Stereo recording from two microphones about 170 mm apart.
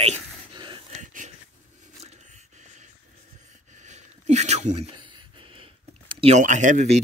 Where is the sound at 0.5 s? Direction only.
30° right (ahead or behind).